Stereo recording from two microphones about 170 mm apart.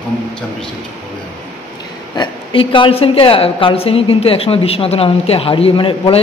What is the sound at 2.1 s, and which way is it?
A woman's voice, 30° left (ahead or behind).